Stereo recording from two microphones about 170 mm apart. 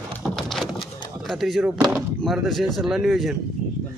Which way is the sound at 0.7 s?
25° left (ahead or behind).